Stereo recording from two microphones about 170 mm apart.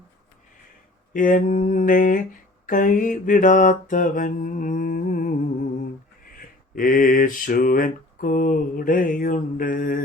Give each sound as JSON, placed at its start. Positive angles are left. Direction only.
{"t": 1.1, "sound": "mantra", "side_deg": 50}
{"t": 6.3, "sound": "mantra", "side_deg": 55}